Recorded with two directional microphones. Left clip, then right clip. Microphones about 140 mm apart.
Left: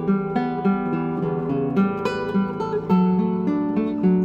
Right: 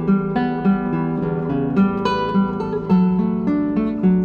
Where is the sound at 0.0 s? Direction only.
30° left (ahead or behind).